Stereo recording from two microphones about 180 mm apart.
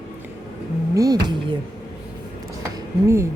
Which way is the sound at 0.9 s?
20° right (ahead or behind).